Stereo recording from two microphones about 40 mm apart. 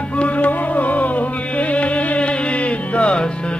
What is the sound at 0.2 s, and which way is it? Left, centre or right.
Music, left.